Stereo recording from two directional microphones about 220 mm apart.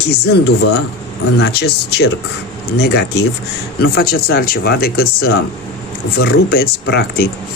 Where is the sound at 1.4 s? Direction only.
50° left (ahead or behind).